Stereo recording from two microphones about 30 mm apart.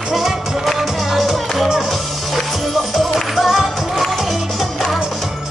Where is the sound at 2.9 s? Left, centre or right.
Centre.